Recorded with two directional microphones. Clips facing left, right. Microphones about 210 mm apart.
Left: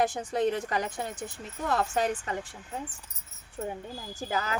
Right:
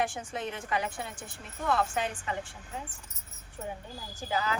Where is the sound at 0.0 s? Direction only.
40° left (ahead or behind).